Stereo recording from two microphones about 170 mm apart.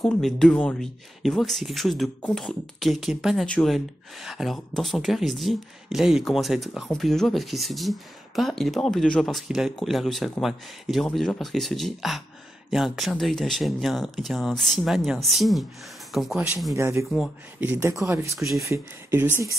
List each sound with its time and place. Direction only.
0.0 s speech: 5° left (ahead or behind)
16.7 s speech: 15° right (ahead or behind)
17.1 s speech: 5° right (ahead or behind)
18.4 s speech: centre (ahead or behind)
18.7 s speech: 15° right (ahead or behind)